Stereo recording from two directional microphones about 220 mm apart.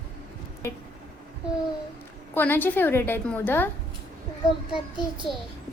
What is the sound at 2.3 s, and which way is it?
A woman's voice, 10° left (ahead or behind).